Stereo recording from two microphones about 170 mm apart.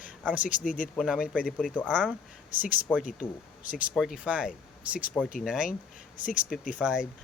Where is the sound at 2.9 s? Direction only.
5° left (ahead or behind).